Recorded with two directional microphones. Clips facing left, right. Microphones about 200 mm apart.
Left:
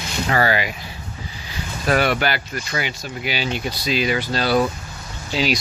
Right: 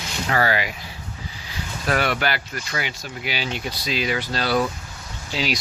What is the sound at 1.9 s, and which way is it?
Speech, 10° left (ahead or behind).